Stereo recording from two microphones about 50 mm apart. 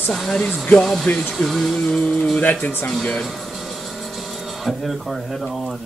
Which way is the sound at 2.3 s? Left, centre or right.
Left.